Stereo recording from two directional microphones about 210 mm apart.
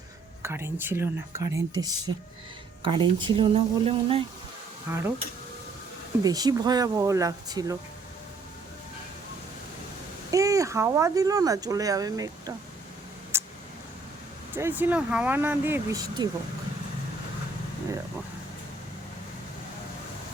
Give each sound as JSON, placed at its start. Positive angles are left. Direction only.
{"t": 0.4, "sound": "speech", "side_deg": -10}
{"t": 4.9, "sound": "speech", "side_deg": -10}
{"t": 6.2, "sound": "speech", "side_deg": -15}
{"t": 10.3, "sound": "speech", "side_deg": -15}
{"t": 13.3, "sound": "a sound", "side_deg": -10}
{"t": 14.5, "sound": "speech", "side_deg": -10}